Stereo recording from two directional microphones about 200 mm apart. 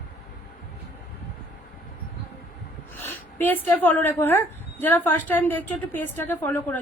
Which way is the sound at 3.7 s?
10° left (ahead or behind).